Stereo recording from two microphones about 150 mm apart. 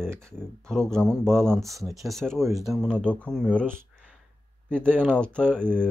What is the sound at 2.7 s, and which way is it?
Speech, 5° left (ahead or behind).